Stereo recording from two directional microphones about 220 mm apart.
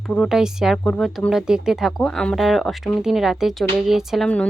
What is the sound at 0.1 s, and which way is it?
Speech, centre (ahead or behind).